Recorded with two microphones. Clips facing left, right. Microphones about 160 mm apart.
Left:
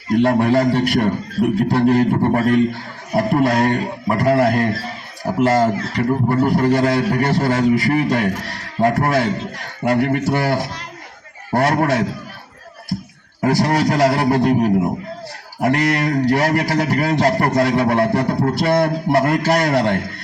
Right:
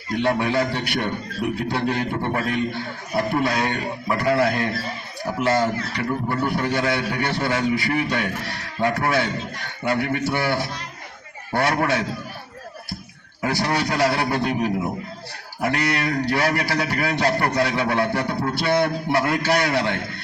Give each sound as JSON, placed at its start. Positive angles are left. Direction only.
{"t": 0.1, "sound": "a man's voice", "side_deg": 40}
{"t": 13.4, "sound": "a man's voice", "side_deg": 45}